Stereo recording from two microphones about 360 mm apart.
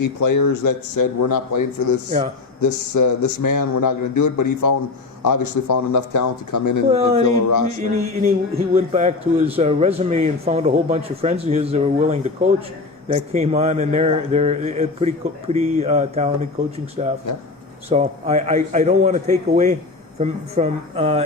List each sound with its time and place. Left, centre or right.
0.0 s a man's voice: left
2.0 s a man's voice: centre
2.6 s a man's voice: left
6.9 s a man's voice: centre